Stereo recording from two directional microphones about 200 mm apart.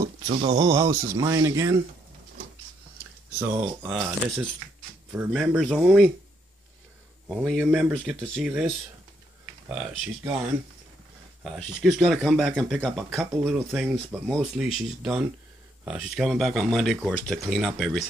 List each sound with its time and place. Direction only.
0.3 s speech: 30° right (ahead or behind)
3.3 s speech: 10° right (ahead or behind)
7.2 s speech: centre (ahead or behind)
11.4 s speech: centre (ahead or behind)